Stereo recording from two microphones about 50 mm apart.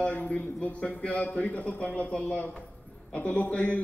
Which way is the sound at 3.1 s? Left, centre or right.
Left.